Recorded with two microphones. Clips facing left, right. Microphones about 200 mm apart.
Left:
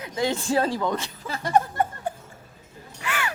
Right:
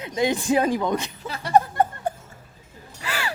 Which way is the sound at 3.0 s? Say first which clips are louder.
Even; 35° right (ahead or behind).